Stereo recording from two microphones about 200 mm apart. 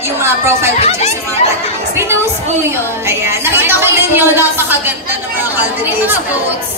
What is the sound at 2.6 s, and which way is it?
Speech, 15° right (ahead or behind).